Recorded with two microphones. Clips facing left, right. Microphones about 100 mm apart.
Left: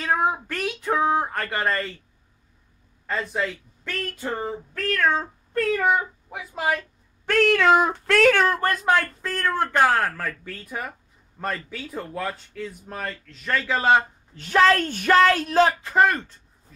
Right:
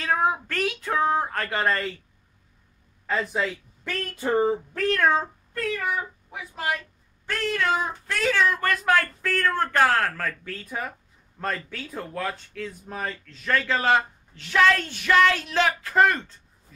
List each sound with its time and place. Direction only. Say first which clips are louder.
0.0 s a sound: left 1 dB; 5° left (ahead or behind)
3.1 s speech: right 1 dB; 5° right (ahead or behind)
4.2 s a sound: right 10 dB; 15° right (ahead or behind)
5.5 s speech: left 7 dB; 50° left (ahead or behind)
7.2 s speech: left 8 dB; 80° left; by 8.5 s 60° left (ahead or behind)
8.5 s speech: left 2 dB; 30° left (ahead or behind)
14.3 s a woman's voice: left 2 dB; 40° left (ahead or behind)
15.8 s speech: left 1 dB; 15° left (ahead or behind)